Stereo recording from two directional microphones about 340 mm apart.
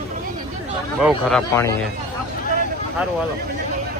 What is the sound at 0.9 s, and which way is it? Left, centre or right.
Speech, centre.